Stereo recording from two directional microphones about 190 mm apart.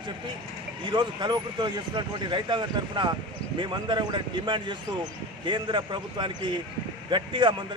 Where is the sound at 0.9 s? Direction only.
25° right (ahead or behind).